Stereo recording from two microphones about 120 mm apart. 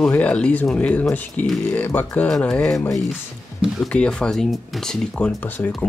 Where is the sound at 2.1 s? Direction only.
5° left (ahead or behind).